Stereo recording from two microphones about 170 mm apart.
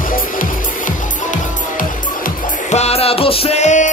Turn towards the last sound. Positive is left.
turn(degrees=45)  # may be behind; listen again after turning